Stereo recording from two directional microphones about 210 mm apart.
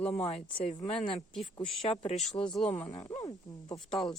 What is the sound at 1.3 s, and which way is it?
Speech, centre (ahead or behind).